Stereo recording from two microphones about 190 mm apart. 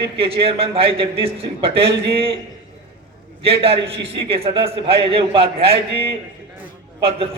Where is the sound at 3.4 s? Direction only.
30° right (ahead or behind).